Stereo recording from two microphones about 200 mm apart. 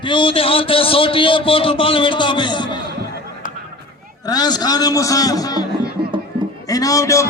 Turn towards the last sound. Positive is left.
turn(degrees=15)  # may be behind; listen again after turning